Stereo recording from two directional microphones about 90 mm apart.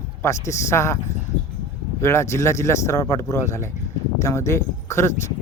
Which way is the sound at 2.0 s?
30° left (ahead or behind).